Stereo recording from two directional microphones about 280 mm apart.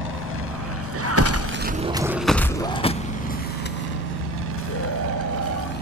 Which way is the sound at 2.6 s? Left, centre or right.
Centre.